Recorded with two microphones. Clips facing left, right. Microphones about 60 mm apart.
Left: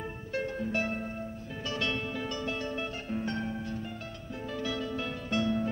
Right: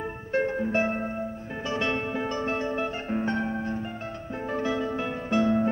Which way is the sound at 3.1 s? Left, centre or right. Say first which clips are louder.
Right 5 dB; right.